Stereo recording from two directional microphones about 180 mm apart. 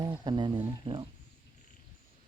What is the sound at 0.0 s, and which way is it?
Speech, 20° right (ahead or behind).